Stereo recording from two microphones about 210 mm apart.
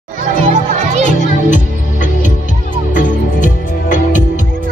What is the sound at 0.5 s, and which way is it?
Music, 35° right (ahead or behind).